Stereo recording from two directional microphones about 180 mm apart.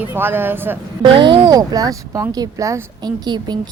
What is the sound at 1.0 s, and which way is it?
Speech, 25° right (ahead or behind).